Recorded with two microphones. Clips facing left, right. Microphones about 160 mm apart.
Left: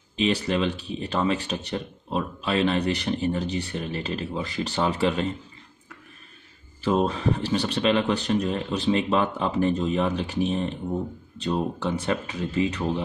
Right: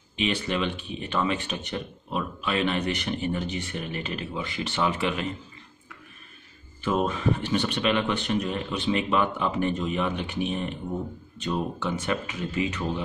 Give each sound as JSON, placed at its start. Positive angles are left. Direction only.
{"t": 0.1, "sound": "speech", "side_deg": 35}
{"t": 6.8, "sound": "speech", "side_deg": 35}